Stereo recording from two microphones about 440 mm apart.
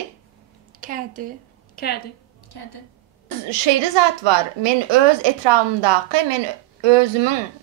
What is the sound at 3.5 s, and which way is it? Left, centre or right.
A woman's voice, right.